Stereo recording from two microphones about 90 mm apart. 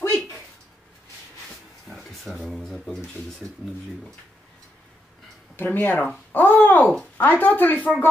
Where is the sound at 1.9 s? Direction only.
5° left (ahead or behind).